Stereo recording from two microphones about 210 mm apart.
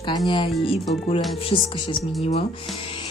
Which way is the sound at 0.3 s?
20° left (ahead or behind).